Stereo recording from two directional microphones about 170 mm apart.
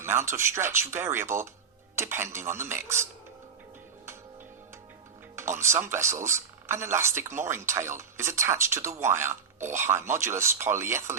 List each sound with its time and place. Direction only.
0.0 s speech: 15° right (ahead or behind)
5.4 s speech: 15° right (ahead or behind)